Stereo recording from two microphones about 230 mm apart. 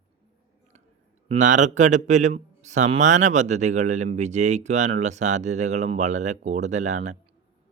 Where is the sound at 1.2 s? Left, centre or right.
Right.